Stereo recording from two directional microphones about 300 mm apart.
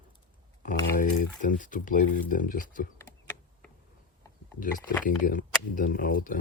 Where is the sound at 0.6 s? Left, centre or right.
Left.